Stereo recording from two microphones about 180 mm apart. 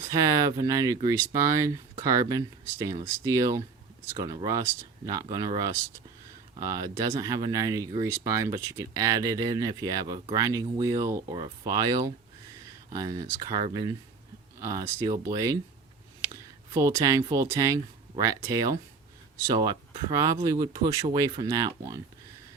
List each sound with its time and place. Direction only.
0.1 s speech: 20° right (ahead or behind)